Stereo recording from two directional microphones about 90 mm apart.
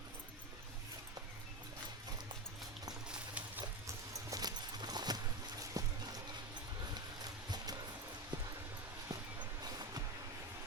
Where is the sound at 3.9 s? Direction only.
40° right (ahead or behind).